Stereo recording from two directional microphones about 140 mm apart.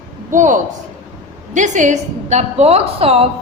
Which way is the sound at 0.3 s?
65° right (ahead or behind).